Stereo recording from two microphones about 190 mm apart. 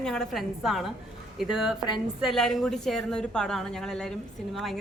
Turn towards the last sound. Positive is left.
turn(degrees=0)  # may be behind; listen again after turning